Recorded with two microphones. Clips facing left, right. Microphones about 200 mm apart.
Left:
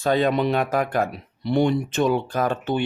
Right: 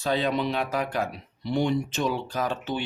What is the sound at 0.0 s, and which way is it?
A man's voice, 50° left (ahead or behind).